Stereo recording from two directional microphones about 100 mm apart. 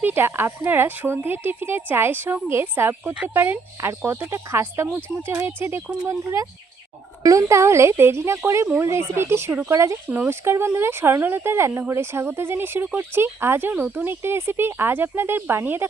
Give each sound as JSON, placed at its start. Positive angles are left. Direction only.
{"t": 0.0, "sound": "speech", "side_deg": -20}